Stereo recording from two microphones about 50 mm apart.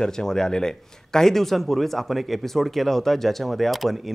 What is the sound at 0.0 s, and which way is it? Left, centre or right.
Speech, centre.